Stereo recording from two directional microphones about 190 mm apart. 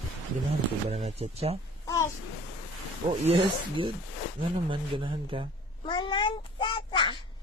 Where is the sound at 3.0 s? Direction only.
25° right (ahead or behind).